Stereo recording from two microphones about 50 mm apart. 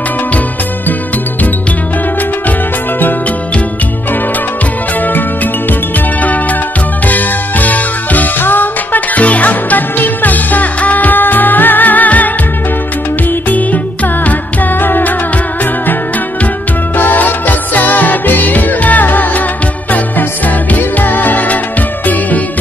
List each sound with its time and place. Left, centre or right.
5.0 s music: left
7.1 s music: left
13.3 s music: left
16.9 s music: left